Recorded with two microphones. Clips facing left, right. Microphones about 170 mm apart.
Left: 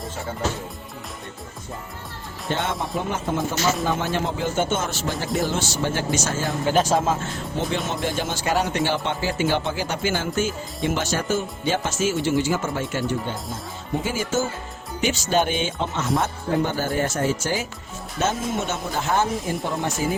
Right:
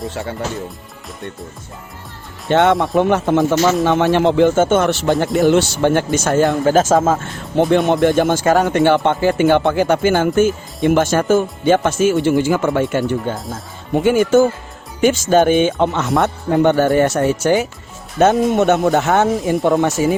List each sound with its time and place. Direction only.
2.5 s speech: 70° right (ahead or behind)
4.5 s speech: 50° right (ahead or behind)
13.9 s speech: 65° right (ahead or behind)